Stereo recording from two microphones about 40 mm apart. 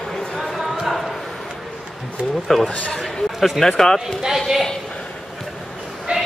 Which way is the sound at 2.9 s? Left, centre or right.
Centre.